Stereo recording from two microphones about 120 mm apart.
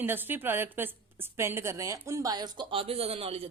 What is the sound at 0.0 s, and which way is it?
A woman's voice, 15° right (ahead or behind).